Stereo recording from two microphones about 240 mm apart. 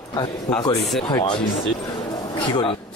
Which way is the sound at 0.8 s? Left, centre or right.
Centre.